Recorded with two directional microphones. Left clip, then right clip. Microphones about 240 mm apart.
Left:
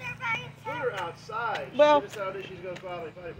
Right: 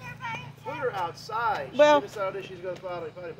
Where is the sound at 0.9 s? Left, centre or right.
Right.